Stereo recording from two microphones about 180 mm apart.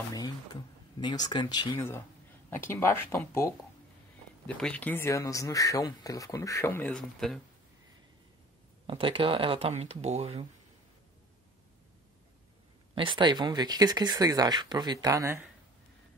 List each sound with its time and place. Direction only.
0.1 s speech: 20° left (ahead or behind); by 7.3 s 5° left (ahead or behind)
8.8 s speech: 30° right (ahead or behind)
12.9 s speech: 30° right (ahead or behind)